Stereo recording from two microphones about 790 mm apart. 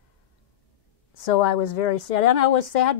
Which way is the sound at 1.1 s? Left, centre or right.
Left.